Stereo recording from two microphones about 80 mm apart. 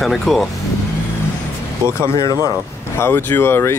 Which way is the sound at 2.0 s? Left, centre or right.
Left.